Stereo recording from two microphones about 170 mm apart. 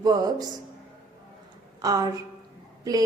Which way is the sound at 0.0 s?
20° right (ahead or behind).